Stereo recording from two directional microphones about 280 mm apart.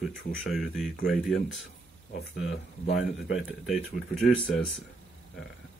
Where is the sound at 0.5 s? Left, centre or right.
Centre.